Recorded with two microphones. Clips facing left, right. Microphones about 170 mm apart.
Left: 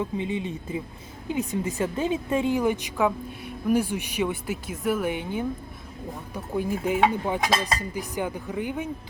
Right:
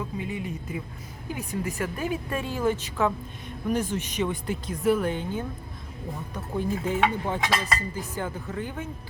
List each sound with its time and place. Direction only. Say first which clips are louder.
0.0 s speech: left 4 dB; 25° left (ahead or behind)